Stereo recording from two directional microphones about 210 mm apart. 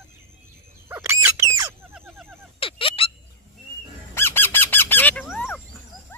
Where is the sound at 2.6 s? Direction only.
25° left (ahead or behind).